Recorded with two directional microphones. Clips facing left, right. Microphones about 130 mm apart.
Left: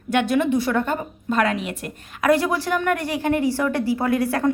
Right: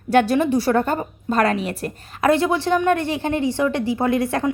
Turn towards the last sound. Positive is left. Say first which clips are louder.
# right 1 dB
turn(degrees=-25)  # may be behind; listen again after turning